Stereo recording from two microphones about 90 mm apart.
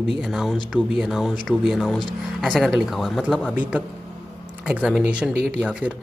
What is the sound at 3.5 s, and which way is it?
Speech, 15° right (ahead or behind).